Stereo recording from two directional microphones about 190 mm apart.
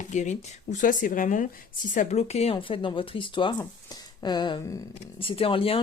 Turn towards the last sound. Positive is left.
turn(degrees=30)  # may be behind; listen again after turning